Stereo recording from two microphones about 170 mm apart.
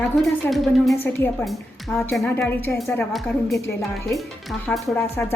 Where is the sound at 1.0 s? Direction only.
15° left (ahead or behind).